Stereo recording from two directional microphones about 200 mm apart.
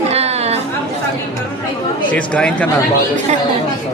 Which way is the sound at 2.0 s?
5° left (ahead or behind).